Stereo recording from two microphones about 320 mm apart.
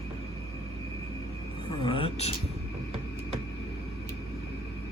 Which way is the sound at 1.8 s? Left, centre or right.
Centre.